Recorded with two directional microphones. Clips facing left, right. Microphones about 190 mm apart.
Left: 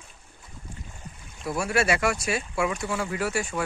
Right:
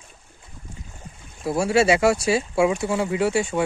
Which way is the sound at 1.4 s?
30° right (ahead or behind).